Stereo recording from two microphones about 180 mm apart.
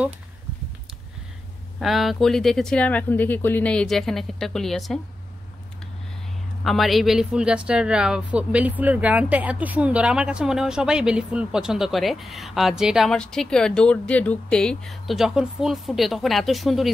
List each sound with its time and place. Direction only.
1.8 s speech: centre (ahead or behind)
6.6 s speech: centre (ahead or behind)